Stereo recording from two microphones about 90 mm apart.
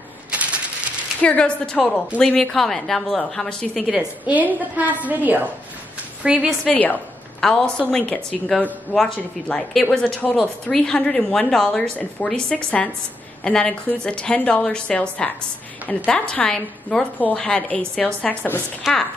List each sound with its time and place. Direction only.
0.3 s typewriter: 15° right (ahead or behind)
1.2 s a woman's voice: 15° left (ahead or behind)
4.3 s a woman's voice: 20° right (ahead or behind)
6.7 s a woman's voice: 20° left (ahead or behind)
7.3 s a woman's voice: 5° left (ahead or behind)
18.9 s a woman's voice: 5° right (ahead or behind)